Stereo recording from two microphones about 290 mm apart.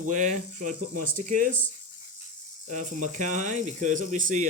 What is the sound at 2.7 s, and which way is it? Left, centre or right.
Speech, right.